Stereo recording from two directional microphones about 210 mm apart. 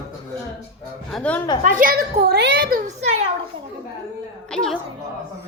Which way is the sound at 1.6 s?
40° right (ahead or behind).